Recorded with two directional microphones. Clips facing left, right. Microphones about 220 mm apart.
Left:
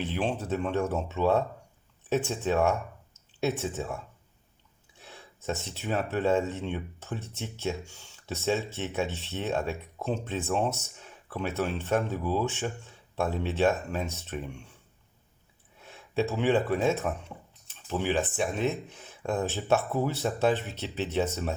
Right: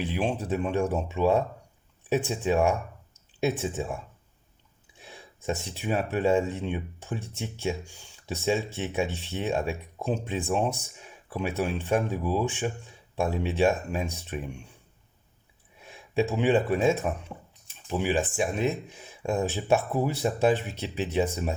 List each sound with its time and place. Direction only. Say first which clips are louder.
0.0 s speech: right 2 dB; 15° right (ahead or behind)
15.8 s speech: right 2 dB; 15° right (ahead or behind)